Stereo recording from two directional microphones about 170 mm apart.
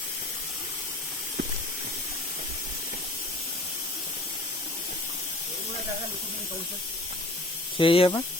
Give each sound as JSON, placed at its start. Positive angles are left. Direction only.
{"t": 7.8, "sound": "speech", "side_deg": 30}